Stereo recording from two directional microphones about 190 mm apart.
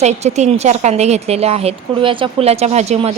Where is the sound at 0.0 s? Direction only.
35° right (ahead or behind).